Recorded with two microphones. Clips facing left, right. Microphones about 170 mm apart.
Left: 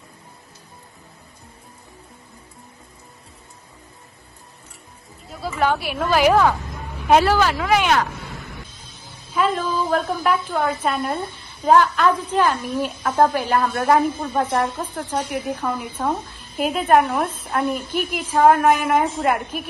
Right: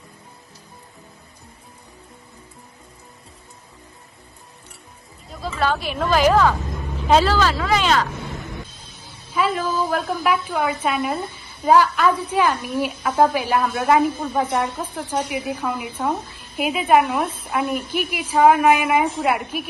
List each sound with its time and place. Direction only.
5.5 s speech: 15° left (ahead or behind)
9.3 s a woman's voice: 5° right (ahead or behind)